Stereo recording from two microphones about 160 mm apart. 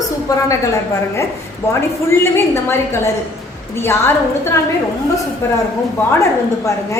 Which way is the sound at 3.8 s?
15° left (ahead or behind).